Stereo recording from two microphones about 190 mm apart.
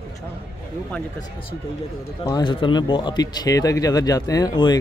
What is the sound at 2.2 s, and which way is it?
Speech, 20° left (ahead or behind).